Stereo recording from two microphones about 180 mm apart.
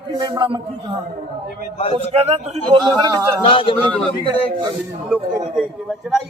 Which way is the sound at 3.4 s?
30° left (ahead or behind).